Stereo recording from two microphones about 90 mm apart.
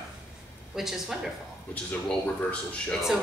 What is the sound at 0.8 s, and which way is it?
Speech, 5° right (ahead or behind).